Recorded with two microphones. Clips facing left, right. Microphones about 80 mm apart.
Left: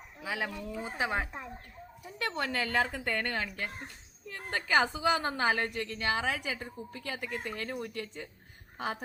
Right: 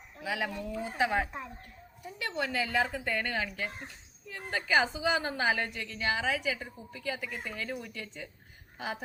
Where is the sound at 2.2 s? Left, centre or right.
Left.